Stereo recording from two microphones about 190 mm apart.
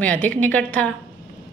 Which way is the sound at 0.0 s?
5° left (ahead or behind).